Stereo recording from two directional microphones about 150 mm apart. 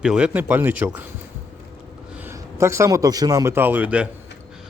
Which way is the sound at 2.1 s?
15° right (ahead or behind).